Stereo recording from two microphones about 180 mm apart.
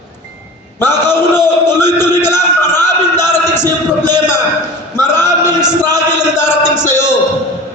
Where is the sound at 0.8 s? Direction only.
15° left (ahead or behind).